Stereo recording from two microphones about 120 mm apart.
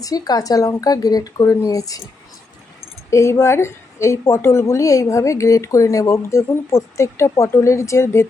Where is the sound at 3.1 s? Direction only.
25° left (ahead or behind).